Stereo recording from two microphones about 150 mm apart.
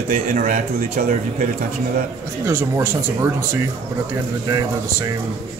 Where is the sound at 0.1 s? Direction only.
55° right (ahead or behind).